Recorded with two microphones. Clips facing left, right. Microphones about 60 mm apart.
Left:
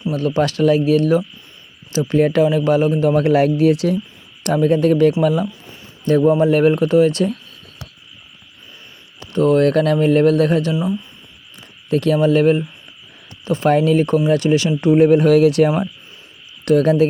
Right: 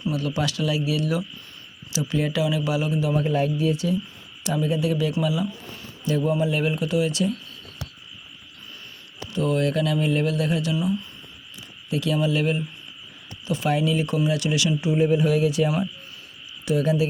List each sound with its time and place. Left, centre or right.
0.1 s speech: left
3.2 s speech: left
4.4 s speech: left
9.3 s speech: left
11.9 s speech: left
14.8 s speech: left